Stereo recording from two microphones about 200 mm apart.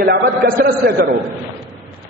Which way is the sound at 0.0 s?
45° right (ahead or behind).